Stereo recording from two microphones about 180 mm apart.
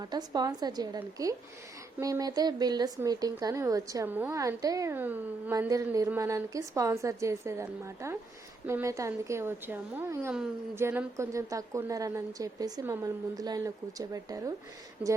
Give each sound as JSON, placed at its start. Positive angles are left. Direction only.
{"t": 0.0, "sound": "a woman's voice", "side_deg": -20}
{"t": 15.0, "sound": "a woman's voice", "side_deg": -10}